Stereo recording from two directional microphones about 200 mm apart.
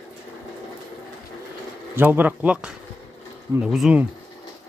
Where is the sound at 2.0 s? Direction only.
10° right (ahead or behind).